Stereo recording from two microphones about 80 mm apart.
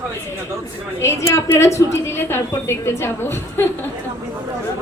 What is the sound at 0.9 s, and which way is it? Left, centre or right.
A woman's voice, left.